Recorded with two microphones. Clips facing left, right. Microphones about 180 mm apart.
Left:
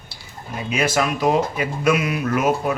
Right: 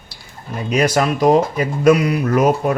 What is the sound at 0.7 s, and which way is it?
Speech, 40° right (ahead or behind).